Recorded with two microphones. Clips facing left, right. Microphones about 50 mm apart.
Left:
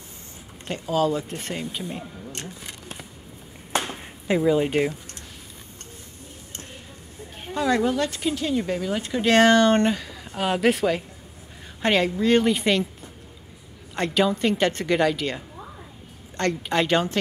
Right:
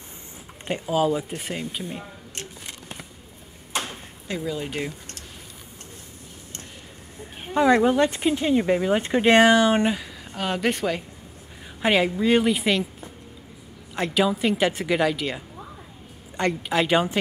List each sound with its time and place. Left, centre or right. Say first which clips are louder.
0.7 s speech: right 1 dB; centre
3.8 s a sound: left 4 dB; left
7.5 s speech: right 4 dB; right
9.4 s speech: even; centre
10.3 s a woman's voice: left 3 dB; centre
13.9 s a woman's voice: even; centre